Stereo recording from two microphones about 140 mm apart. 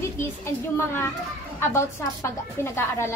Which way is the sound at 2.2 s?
20° left (ahead or behind).